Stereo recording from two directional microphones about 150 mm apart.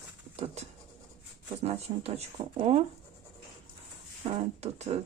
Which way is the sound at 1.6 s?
45° right (ahead or behind).